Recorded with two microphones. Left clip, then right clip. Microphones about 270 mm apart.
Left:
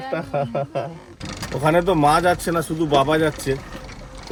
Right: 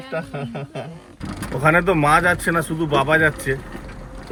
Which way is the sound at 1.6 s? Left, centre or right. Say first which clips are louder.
Right 1 dB; centre.